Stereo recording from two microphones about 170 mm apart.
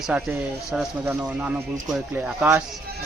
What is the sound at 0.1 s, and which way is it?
Speech, 5° right (ahead or behind).